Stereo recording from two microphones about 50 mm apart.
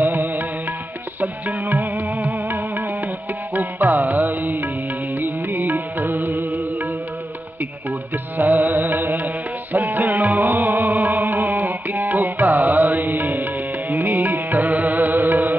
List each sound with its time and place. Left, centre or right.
0.0 s music: right
8.4 s music: right